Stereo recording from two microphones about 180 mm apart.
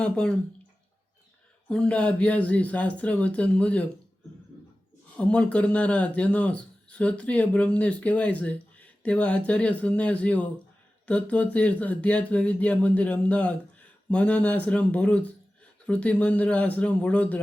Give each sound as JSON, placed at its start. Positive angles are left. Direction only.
{"t": 0.0, "sound": "speech", "side_deg": 5}
{"t": 1.6, "sound": "speech", "side_deg": 5}
{"t": 5.1, "sound": "speech", "side_deg": 5}